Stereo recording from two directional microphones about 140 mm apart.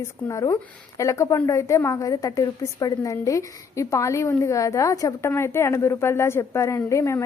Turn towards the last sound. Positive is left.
turn(degrees=20)  # may be behind; listen again after turning